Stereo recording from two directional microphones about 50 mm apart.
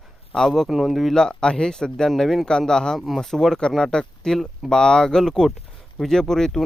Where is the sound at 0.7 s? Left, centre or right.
Centre.